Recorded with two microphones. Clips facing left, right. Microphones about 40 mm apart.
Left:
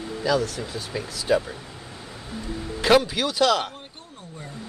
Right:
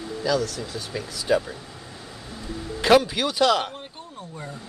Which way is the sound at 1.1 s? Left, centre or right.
Centre.